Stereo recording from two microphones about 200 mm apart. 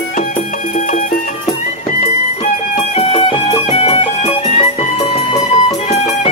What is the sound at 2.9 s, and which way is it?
Music, 30° left (ahead or behind).